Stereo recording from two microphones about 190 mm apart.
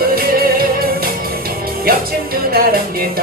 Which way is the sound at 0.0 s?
50° right (ahead or behind).